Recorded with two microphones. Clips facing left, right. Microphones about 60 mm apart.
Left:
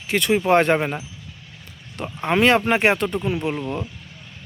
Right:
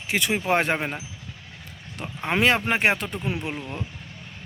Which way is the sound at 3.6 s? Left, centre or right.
Left.